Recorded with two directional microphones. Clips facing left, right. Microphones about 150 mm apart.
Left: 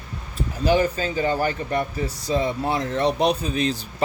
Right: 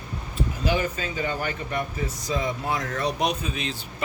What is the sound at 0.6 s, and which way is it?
Speech, 35° left (ahead or behind).